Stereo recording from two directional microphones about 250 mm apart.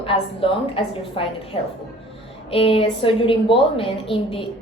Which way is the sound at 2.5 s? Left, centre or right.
Left.